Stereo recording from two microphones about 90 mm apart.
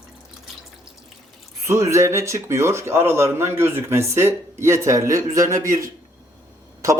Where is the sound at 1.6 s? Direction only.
35° right (ahead or behind).